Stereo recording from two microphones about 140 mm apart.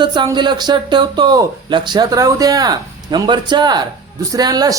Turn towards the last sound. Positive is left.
turn(degrees=-30)  # may be behind; listen again after turning